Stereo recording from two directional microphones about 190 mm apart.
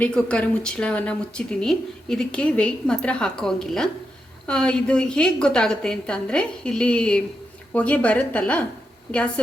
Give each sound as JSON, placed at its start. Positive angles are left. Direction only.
{"t": 0.0, "sound": "a woman's voice", "side_deg": 5}